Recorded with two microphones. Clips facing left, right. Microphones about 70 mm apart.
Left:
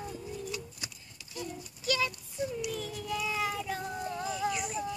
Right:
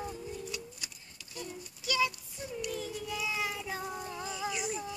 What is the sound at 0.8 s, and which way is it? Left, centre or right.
Clip-clop, left.